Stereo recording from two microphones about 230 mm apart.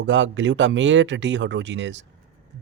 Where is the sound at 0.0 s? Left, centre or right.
Right.